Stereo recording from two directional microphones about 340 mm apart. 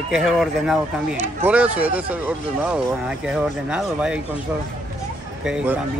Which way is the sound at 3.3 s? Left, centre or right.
Centre.